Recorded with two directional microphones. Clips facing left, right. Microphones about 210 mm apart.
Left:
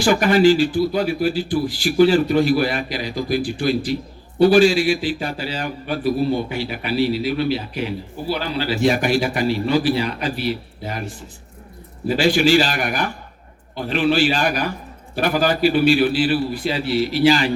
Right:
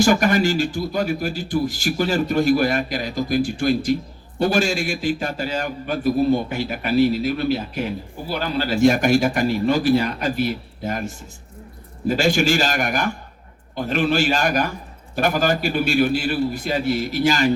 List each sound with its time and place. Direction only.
0.0 s a man's voice: 45° right (ahead or behind)